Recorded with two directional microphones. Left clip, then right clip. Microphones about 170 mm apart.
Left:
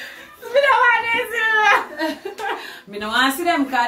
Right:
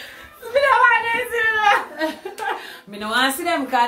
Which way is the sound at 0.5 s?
5° right (ahead or behind).